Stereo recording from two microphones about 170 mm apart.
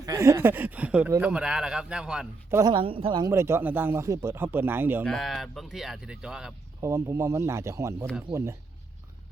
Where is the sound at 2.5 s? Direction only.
25° right (ahead or behind).